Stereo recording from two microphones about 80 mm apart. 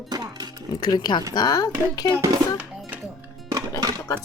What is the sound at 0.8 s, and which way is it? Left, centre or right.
Speech, left.